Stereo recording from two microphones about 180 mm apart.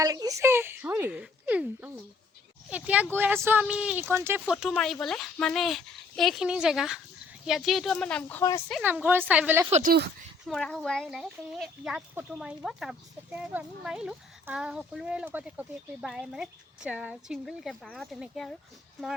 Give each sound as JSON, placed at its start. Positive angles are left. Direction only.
{"t": 0.0, "sound": "a sound", "side_deg": -20}
{"t": 2.6, "sound": "speech", "side_deg": -5}
{"t": 4.5, "sound": "speech", "side_deg": 0}
{"t": 8.8, "sound": "speech", "side_deg": -10}
{"t": 9.8, "sound": "speech", "side_deg": -60}
{"t": 10.4, "sound": "speech", "side_deg": 0}